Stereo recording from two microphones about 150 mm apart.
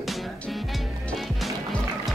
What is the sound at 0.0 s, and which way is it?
Music, centre (ahead or behind).